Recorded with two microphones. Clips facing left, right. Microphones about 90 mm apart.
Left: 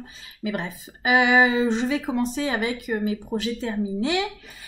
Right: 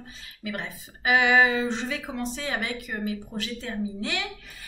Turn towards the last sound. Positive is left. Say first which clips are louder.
# left 6 dB
turn(degrees=20)  # may be behind; listen again after turning